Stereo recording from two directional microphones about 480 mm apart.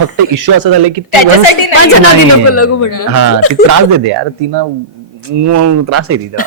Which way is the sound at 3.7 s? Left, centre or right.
Right.